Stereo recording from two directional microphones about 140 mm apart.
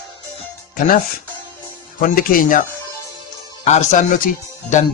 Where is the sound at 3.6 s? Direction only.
55° left (ahead or behind).